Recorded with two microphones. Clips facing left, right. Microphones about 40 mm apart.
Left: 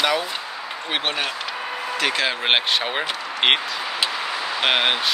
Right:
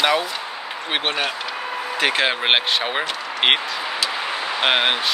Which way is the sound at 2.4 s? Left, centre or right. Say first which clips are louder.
Right 1 dB; centre.